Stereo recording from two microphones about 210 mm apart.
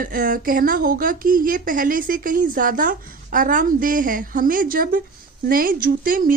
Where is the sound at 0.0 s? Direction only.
40° right (ahead or behind).